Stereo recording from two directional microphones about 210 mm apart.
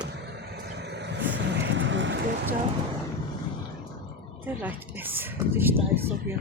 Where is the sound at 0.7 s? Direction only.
55° right (ahead or behind).